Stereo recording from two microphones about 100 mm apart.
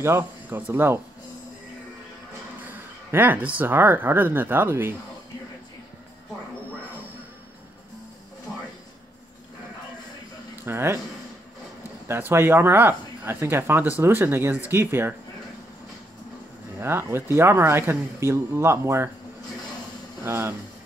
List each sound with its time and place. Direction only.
0.0 s speech: 25° right (ahead or behind)
2.6 s speech: 20° right (ahead or behind)
10.6 s speech: 25° right (ahead or behind)
12.1 s speech: 25° right (ahead or behind)
16.8 s speech: 25° right (ahead or behind)
20.2 s speech: 25° right (ahead or behind)